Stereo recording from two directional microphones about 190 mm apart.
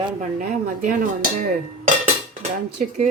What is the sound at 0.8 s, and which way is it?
Speech, 40° right (ahead or behind).